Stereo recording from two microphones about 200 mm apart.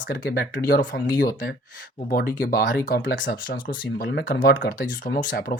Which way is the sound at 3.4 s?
45° left (ahead or behind).